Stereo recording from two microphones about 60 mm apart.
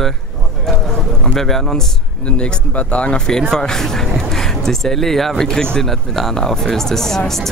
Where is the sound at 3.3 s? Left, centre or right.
Centre.